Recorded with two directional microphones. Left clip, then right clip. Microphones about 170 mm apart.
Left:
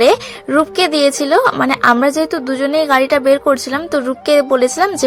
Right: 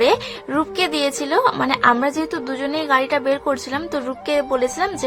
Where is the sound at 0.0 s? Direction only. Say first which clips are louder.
Left 5 dB; 30° left (ahead or behind).